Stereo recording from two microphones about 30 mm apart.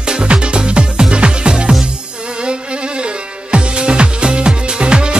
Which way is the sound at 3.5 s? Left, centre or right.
Right.